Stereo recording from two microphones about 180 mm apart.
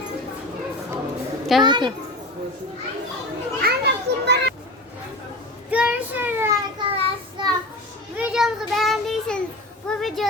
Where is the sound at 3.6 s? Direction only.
65° right (ahead or behind).